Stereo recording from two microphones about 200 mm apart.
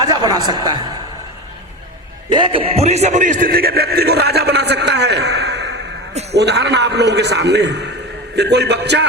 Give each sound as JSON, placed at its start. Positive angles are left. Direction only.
{"t": 0.0, "sound": "speech", "side_deg": -20}
{"t": 2.3, "sound": "a man's voice", "side_deg": -25}